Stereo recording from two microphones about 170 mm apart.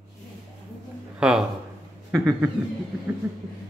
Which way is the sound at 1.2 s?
5° right (ahead or behind).